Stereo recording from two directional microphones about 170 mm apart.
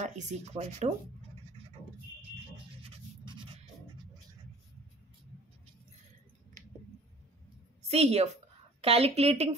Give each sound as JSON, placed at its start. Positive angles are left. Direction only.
{"t": 0.0, "sound": "speech", "side_deg": -45}
{"t": 2.5, "sound": "a sound", "side_deg": -35}
{"t": 7.9, "sound": "speech", "side_deg": -40}